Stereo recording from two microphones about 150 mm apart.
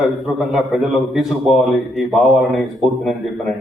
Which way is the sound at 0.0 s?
5° right (ahead or behind).